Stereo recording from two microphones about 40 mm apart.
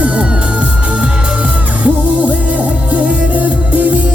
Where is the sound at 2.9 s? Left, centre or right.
Right.